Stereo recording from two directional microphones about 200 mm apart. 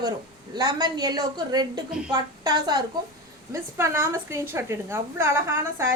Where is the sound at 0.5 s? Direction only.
20° right (ahead or behind).